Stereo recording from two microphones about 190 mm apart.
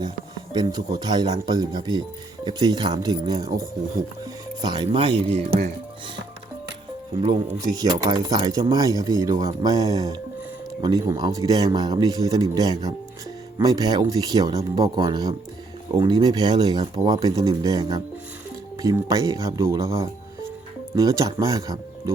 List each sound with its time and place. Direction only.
0.5 s speech: 20° right (ahead or behind)
5.5 s speech: 45° right (ahead or behind)
7.2 s speech: 20° right (ahead or behind)